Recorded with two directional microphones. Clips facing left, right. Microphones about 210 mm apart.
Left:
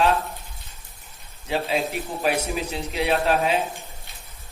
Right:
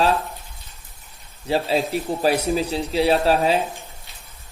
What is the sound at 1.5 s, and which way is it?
A man's voice, 35° right (ahead or behind).